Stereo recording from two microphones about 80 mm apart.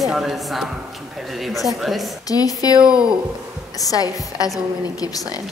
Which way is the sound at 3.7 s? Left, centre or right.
Left.